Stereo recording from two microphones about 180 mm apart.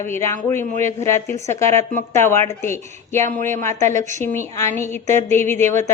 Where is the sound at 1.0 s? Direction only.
15° left (ahead or behind).